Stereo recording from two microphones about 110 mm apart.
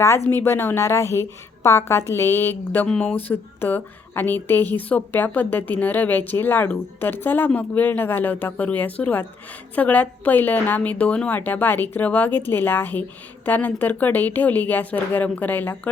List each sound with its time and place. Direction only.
0.3 s a woman's voice: 20° left (ahead or behind)